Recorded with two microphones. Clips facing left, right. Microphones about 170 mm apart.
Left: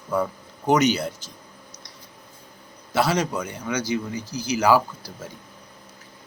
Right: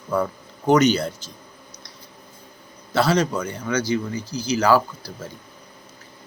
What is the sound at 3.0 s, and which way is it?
Speech, 15° left (ahead or behind).